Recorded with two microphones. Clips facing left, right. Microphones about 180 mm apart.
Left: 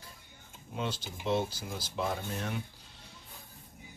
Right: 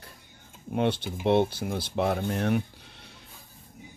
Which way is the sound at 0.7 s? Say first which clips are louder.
Right 10 dB; 60° right (ahead or behind).